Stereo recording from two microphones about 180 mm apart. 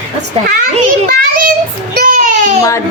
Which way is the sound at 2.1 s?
45° right (ahead or behind).